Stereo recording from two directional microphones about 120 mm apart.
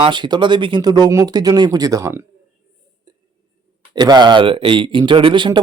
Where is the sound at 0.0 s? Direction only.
40° right (ahead or behind).